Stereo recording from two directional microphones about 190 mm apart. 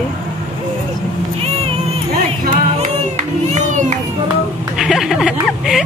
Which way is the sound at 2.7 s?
40° right (ahead or behind).